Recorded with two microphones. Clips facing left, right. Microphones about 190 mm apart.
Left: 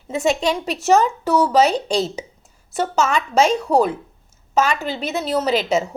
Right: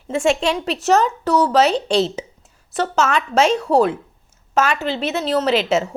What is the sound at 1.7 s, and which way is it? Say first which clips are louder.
Speech: right 3 dB; 25° right (ahead or behind).